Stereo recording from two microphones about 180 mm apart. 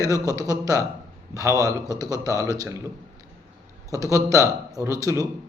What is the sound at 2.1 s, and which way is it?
Speech, 15° left (ahead or behind).